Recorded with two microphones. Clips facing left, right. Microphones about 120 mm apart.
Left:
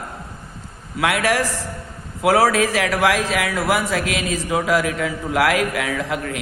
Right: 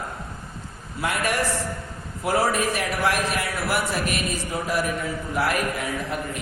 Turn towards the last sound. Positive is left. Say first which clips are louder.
# left 4 dB
turn(degrees=85)